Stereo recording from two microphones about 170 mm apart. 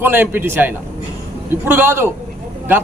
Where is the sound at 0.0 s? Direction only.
10° right (ahead or behind).